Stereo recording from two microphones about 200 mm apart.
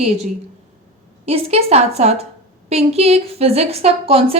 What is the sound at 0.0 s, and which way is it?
A woman's voice, 35° right (ahead or behind).